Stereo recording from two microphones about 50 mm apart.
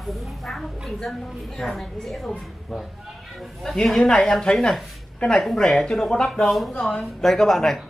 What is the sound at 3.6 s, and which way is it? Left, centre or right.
A man's voice, centre.